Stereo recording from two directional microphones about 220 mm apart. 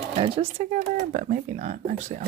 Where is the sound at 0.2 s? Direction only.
30° right (ahead or behind).